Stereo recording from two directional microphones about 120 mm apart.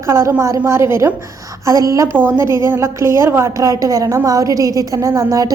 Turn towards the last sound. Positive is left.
turn(degrees=-30)  # may be behind; listen again after turning